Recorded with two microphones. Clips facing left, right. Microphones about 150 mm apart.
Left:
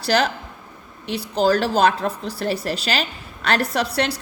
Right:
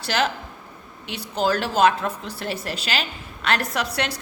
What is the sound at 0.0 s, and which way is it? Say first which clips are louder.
A woman's voice: left 4 dB; 40° left (ahead or behind).